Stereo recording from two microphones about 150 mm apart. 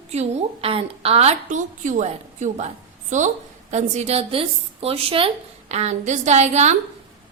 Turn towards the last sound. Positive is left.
turn(degrees=-50)  # may be behind; listen again after turning